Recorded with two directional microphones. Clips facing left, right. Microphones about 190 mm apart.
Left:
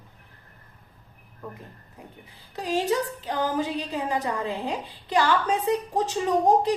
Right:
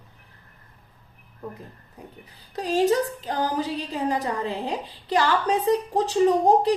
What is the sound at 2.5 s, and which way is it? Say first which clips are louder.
A woman's voice: right 4 dB; 40° right (ahead or behind).